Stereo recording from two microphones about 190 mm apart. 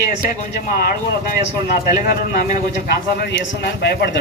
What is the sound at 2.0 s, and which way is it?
Speech, 50° left (ahead or behind).